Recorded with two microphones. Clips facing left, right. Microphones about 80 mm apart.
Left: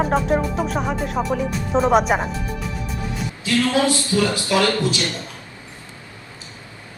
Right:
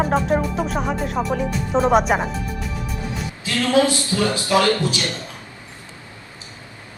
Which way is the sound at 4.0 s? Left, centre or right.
Right.